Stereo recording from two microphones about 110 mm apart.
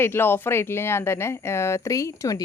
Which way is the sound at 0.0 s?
20° left (ahead or behind).